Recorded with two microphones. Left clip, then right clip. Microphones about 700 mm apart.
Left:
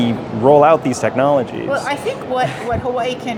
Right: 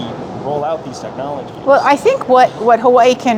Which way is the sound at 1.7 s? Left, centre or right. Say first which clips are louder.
Right 11 dB; right.